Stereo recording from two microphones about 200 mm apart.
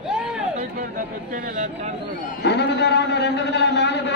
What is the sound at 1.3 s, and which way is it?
Speech, 40° right (ahead or behind).